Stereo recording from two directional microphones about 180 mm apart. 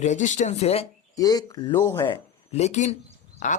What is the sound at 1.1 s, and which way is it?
Speech, 20° left (ahead or behind).